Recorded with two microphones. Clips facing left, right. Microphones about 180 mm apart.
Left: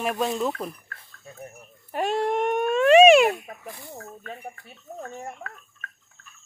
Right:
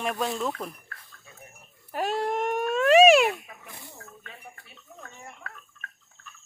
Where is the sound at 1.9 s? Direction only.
Centre (ahead or behind).